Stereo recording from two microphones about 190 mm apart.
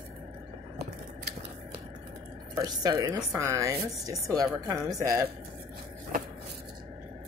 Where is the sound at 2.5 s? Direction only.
20° right (ahead or behind).